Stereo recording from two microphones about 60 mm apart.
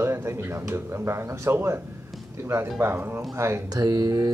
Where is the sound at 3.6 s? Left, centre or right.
Right.